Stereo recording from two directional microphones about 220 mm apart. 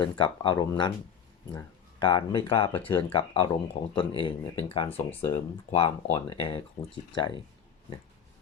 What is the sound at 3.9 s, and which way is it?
Speech, 25° left (ahead or behind).